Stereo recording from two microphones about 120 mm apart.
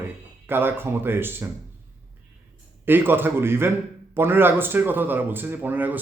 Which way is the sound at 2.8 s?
15° right (ahead or behind).